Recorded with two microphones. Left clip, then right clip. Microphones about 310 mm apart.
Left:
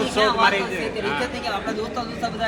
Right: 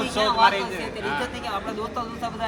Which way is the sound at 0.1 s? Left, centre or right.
Right.